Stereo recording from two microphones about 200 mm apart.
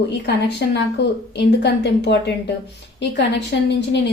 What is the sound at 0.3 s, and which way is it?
A woman's voice, 60° left (ahead or behind).